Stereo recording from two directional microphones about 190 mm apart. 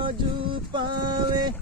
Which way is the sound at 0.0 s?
25° right (ahead or behind).